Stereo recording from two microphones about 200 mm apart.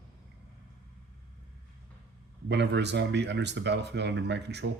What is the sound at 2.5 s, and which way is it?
Speech, 60° right (ahead or behind).